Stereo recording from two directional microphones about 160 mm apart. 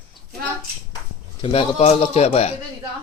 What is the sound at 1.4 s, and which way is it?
A man's voice, 35° left (ahead or behind).